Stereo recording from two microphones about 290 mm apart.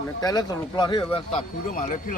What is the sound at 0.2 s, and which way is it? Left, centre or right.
Speech, centre.